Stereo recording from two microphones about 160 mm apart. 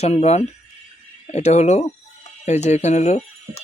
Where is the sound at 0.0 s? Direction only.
45° left (ahead or behind).